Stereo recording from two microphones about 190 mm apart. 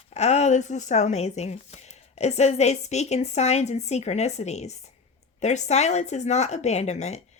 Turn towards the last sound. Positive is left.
turn(degrees=35)  # may be behind; listen again after turning